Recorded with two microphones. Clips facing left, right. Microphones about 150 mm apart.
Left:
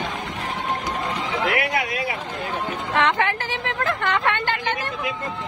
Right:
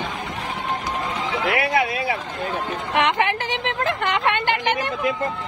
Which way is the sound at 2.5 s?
15° right (ahead or behind).